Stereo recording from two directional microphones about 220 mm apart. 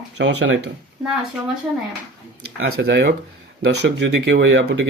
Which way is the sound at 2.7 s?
50° right (ahead or behind).